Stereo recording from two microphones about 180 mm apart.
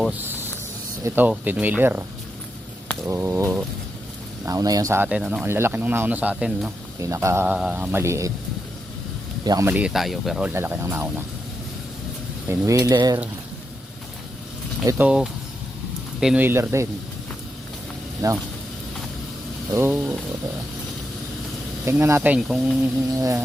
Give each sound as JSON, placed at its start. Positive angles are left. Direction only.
{"t": 0.2, "sound": "a sound", "side_deg": -10}
{"t": 1.0, "sound": "speech", "side_deg": -10}
{"t": 3.1, "sound": "speech", "side_deg": -15}
{"t": 7.0, "sound": "speech", "side_deg": -15}
{"t": 9.4, "sound": "speech", "side_deg": -20}
{"t": 10.5, "sound": "speech", "side_deg": -15}
{"t": 12.5, "sound": "speech", "side_deg": -15}
{"t": 14.8, "sound": "speech", "side_deg": -10}
{"t": 18.2, "sound": "speech", "side_deg": -20}
{"t": 19.7, "sound": "speech", "side_deg": -15}
{"t": 21.8, "sound": "speech", "side_deg": -15}
{"t": 23.1, "sound": "speech", "side_deg": -20}